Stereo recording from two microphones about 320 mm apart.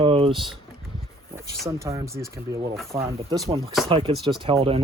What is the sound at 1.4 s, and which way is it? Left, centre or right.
Speech, centre.